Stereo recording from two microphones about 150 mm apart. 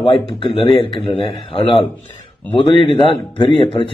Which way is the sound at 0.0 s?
35° left (ahead or behind).